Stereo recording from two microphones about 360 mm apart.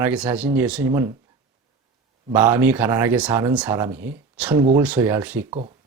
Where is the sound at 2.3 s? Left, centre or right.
Centre.